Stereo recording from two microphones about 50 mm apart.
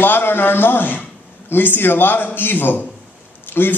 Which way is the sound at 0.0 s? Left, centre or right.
Left.